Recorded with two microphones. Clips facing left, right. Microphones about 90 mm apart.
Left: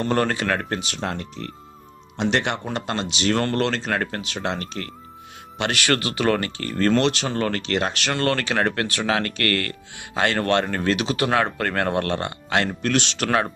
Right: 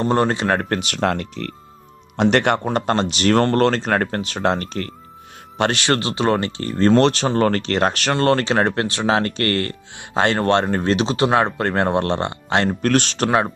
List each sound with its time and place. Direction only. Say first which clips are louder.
0.0 s speech: right 4 dB; 25° right (ahead or behind)
0.7 s speech: right 7 dB; 65° right (ahead or behind)
2.1 s speech: right 6 dB; 55° right (ahead or behind); by 7.0 s 25° right (ahead or behind)
7.0 s speech: right 6 dB; 35° right (ahead or behind)
12.8 s speech: right 5 dB; 45° right (ahead or behind)
13.2 s speech: right 3 dB; 20° right (ahead or behind)